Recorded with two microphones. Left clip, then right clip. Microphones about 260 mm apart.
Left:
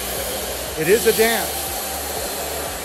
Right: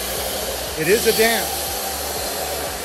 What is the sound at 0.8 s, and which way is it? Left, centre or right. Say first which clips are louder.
Speech: even; centre.